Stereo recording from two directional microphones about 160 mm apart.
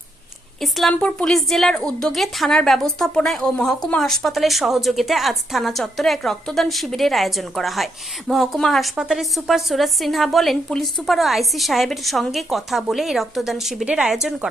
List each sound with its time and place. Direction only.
0.6 s a woman's voice: centre (ahead or behind)